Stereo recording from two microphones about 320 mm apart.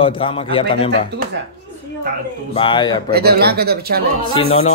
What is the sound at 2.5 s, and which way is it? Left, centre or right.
Speech, centre.